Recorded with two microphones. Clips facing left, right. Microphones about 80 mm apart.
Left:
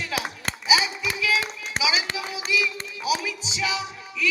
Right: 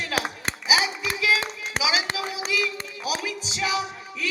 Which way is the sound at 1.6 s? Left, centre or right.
Right.